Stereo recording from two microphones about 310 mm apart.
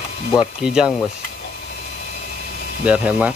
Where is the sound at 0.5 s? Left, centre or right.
Centre.